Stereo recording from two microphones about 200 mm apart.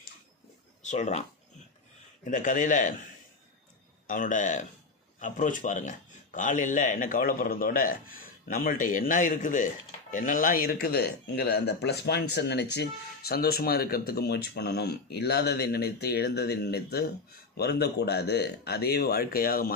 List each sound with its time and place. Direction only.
0.8 s speech: 35° left (ahead or behind)
2.2 s a man's voice: 40° left (ahead or behind)
4.0 s a man's voice: 40° left (ahead or behind)